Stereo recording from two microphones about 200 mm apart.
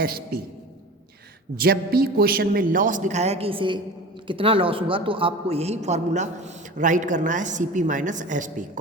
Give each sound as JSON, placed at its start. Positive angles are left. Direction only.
{"t": 0.0, "sound": "a man's voice", "side_deg": -50}
{"t": 1.5, "sound": "a man's voice", "side_deg": -50}